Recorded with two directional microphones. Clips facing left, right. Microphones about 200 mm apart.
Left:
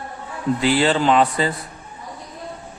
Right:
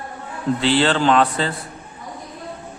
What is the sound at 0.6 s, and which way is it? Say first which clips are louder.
Speech: even; 5° left (ahead or behind).